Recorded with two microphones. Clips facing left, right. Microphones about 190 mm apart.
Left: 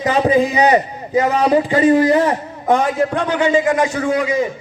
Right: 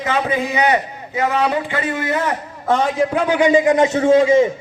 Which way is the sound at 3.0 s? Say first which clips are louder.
Right 1 dB; 5° right (ahead or behind).